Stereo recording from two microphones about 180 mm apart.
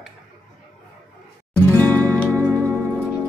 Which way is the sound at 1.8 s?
10° left (ahead or behind).